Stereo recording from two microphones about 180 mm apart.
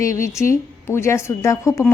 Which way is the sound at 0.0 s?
15° left (ahead or behind).